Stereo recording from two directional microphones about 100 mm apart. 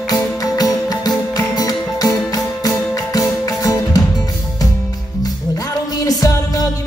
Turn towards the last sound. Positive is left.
turn(degrees=40)  # may be behind; listen again after turning